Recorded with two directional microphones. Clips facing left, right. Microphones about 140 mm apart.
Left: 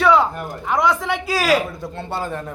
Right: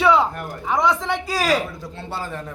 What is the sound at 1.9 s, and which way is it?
Speech, 55° left (ahead or behind).